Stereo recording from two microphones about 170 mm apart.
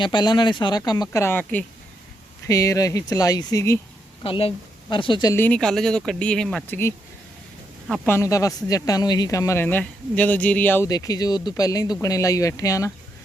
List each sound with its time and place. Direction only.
0.0 s speech: 25° left (ahead or behind)
4.2 s speech: 35° left (ahead or behind)
5.3 s speech: 10° left (ahead or behind)
8.0 s speech: 15° left (ahead or behind)